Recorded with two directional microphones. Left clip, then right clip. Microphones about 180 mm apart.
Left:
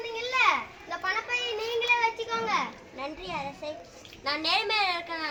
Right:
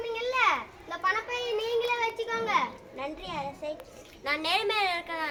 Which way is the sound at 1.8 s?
Centre (ahead or behind).